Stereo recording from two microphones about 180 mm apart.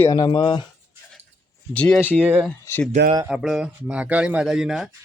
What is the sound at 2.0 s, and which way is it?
Speech, 10° right (ahead or behind).